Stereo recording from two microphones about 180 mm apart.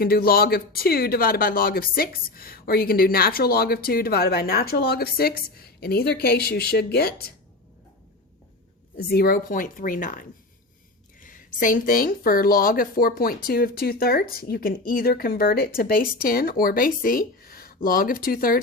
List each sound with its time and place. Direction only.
0.0 s speech: 55° left (ahead or behind)
9.0 s speech: 55° left (ahead or behind)